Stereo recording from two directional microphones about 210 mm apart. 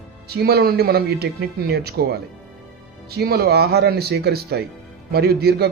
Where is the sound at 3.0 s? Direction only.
50° right (ahead or behind).